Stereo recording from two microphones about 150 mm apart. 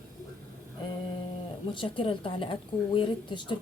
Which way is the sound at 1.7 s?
35° left (ahead or behind).